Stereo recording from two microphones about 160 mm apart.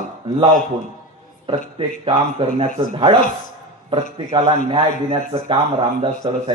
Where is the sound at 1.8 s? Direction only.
35° right (ahead or behind).